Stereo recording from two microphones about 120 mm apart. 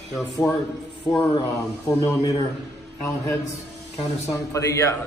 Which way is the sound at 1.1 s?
25° left (ahead or behind).